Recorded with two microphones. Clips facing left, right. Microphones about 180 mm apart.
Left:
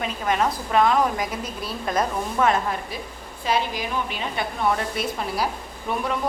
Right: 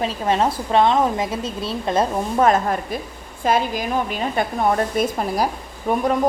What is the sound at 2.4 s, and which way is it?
A woman's voice, 45° right (ahead or behind).